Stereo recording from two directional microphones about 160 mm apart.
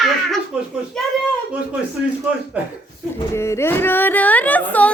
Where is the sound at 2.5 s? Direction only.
10° right (ahead or behind).